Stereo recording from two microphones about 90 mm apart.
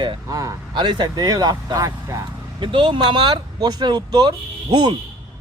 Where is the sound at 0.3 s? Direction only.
40° right (ahead or behind).